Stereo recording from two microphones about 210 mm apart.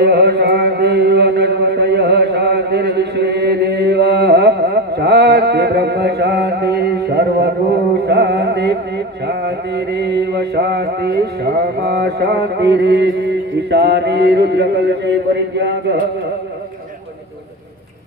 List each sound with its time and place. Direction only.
0.0 s mantra: 50° right (ahead or behind)
8.1 s carnatic music: 55° right (ahead or behind)
9.9 s mantra: 55° right (ahead or behind)